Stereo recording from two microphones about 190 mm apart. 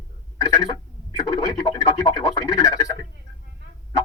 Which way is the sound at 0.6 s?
20° left (ahead or behind).